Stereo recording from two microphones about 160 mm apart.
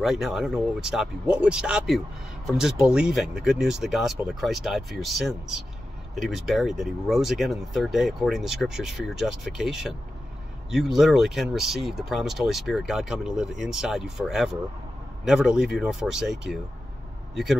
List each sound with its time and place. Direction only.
0.0 s speech: centre (ahead or behind)